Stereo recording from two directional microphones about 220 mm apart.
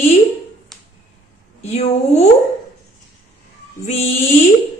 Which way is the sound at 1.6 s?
30° left (ahead or behind).